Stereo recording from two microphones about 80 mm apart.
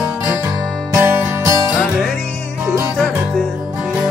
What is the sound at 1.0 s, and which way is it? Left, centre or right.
Music, right.